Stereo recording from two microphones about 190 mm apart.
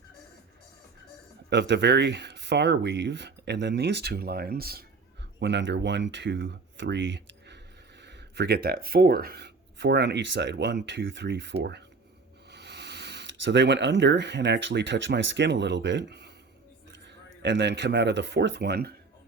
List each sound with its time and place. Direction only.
1.5 s speech: 65° right (ahead or behind)
5.4 s speech: 65° right (ahead or behind)
17.4 s speech: 65° right (ahead or behind)